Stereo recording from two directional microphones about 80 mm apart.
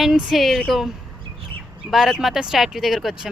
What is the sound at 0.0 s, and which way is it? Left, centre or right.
Speech, centre.